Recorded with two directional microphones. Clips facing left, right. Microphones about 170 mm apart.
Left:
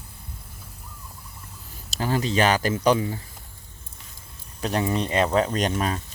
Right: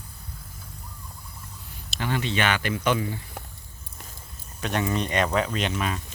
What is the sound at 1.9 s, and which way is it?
Speech, 35° left (ahead or behind).